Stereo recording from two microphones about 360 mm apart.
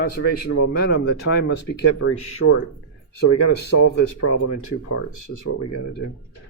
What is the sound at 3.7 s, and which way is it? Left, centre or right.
Speech, left.